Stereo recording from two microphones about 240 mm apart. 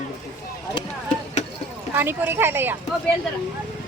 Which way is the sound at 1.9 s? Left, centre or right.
Centre.